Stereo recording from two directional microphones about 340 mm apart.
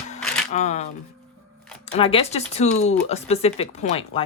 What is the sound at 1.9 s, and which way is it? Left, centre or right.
Speech, centre.